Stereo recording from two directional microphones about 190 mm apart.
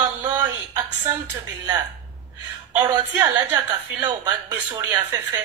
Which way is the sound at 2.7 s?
15° right (ahead or behind).